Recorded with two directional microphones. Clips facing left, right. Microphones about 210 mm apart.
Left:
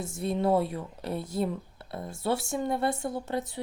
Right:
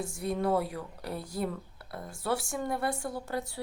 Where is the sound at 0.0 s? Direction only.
25° left (ahead or behind).